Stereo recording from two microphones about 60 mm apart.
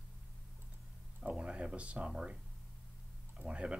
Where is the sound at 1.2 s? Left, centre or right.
Centre.